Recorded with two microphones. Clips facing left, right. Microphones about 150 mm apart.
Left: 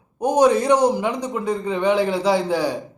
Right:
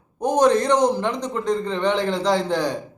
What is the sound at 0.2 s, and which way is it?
Speech, 10° left (ahead or behind).